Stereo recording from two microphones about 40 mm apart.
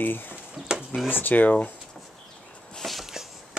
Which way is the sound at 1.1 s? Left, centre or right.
Left.